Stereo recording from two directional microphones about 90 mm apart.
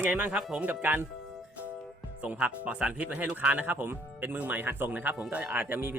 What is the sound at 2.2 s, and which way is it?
Speech, 15° right (ahead or behind).